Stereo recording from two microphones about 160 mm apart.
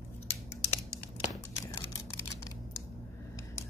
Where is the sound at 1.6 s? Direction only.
20° left (ahead or behind).